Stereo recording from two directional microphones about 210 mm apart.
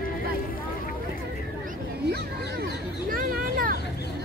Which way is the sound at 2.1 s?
50° right (ahead or behind).